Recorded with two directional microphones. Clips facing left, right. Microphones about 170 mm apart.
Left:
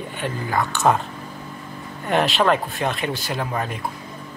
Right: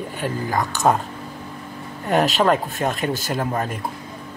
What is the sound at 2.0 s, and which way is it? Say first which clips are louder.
Speech: right 1 dB; 40° right (ahead or behind).